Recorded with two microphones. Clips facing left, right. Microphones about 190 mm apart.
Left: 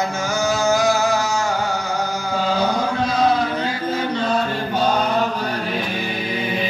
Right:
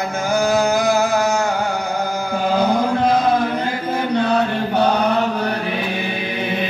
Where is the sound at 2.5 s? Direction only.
55° right (ahead or behind).